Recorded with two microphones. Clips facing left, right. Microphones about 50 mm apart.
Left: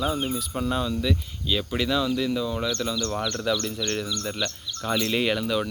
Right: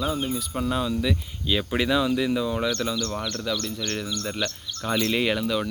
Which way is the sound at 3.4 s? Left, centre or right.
Centre.